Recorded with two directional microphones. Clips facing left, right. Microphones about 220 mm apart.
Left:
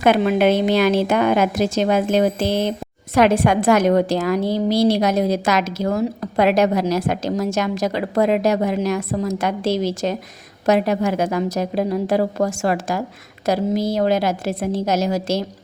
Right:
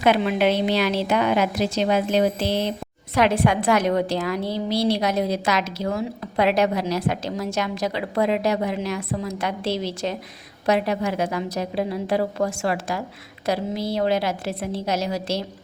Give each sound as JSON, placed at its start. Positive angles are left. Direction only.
{"t": 0.0, "sound": "a woman's voice", "side_deg": 45}